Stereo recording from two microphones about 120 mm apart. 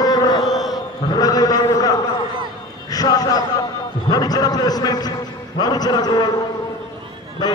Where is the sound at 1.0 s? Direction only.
30° left (ahead or behind).